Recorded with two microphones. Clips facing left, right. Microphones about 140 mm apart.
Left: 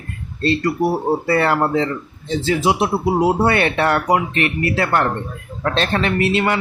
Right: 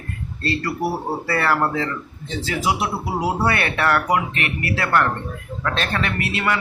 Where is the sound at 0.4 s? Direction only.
20° left (ahead or behind).